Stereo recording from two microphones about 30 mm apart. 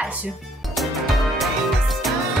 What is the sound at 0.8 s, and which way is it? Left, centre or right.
Music, centre.